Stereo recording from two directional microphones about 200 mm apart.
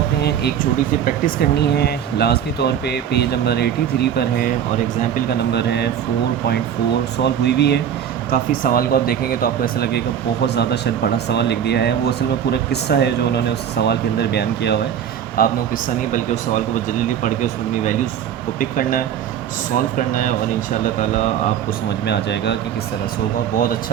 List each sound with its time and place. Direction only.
0.2 s speech: 55° left (ahead or behind)
7.2 s speech: 55° left (ahead or behind)
8.3 s speech: 45° left (ahead or behind)
15.4 s speech: 45° left (ahead or behind)
18.6 s speech: 45° left (ahead or behind)
22.0 s speech: 60° left (ahead or behind)